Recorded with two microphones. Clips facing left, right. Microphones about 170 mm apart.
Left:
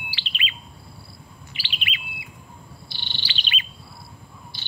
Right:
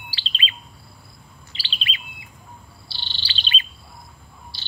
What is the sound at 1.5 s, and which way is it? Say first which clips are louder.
Chirp: even; 15° left (ahead or behind).